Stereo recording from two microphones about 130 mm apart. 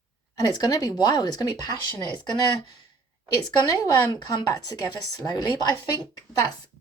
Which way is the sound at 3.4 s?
30° left (ahead or behind).